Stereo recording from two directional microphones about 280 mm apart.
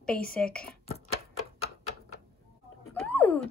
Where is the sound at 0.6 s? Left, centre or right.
Left.